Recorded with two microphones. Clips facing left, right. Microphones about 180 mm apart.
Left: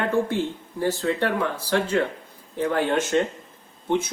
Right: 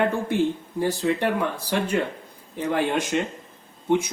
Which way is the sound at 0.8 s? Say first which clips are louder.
Even; 15° right (ahead or behind).